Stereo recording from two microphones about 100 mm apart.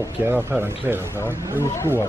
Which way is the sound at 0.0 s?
25° right (ahead or behind).